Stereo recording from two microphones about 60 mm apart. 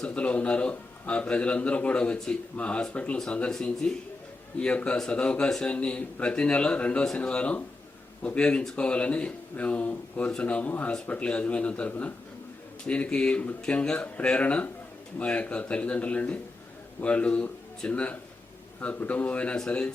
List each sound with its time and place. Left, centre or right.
0.0 s a man's voice: left
2.1 s speech: centre
2.6 s a man's voice: left